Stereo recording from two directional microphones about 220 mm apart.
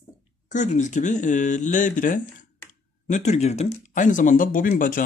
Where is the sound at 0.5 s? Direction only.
35° left (ahead or behind).